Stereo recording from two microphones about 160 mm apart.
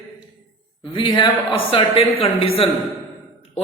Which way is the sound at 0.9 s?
30° left (ahead or behind).